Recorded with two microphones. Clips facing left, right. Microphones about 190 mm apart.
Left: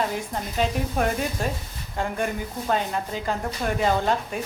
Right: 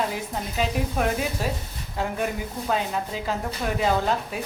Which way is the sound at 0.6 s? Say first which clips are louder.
Left 1 dB; centre (ahead or behind).